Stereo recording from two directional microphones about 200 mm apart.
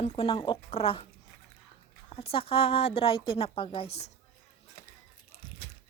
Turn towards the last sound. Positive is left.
turn(degrees=60)  # may be behind; listen again after turning